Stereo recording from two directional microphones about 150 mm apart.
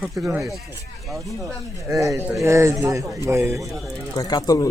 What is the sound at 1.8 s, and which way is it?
Speech, 20° right (ahead or behind).